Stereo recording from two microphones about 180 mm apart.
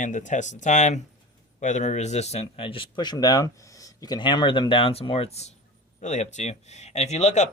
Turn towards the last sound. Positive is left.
turn(degrees=40)  # may be behind; listen again after turning